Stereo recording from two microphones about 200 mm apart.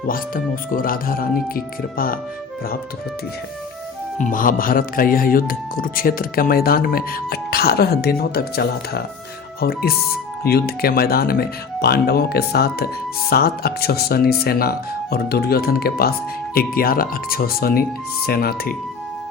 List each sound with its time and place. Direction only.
0.1 s speech: 45° left (ahead or behind)
4.2 s speech: 40° left (ahead or behind)